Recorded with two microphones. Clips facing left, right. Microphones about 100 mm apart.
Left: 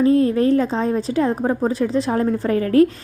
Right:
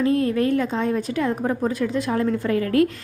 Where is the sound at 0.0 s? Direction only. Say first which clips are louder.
Left 4 dB; 30° left (ahead or behind).